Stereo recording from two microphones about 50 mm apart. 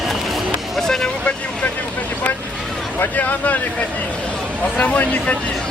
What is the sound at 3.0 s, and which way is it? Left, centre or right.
Speech, left.